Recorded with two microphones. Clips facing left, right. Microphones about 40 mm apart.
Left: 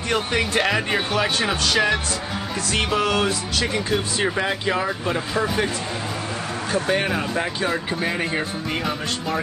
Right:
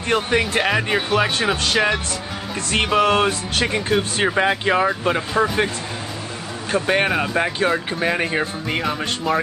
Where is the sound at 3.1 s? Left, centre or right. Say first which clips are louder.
Right 3 dB; right.